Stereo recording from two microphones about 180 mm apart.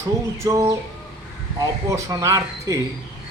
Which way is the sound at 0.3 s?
15° right (ahead or behind).